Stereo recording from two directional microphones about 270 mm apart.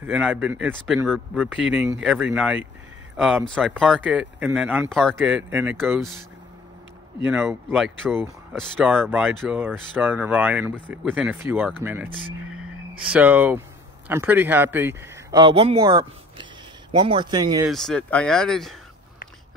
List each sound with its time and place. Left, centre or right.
0.0 s speech: centre
7.2 s speech: centre
13.1 s speech: centre
17.6 s speech: centre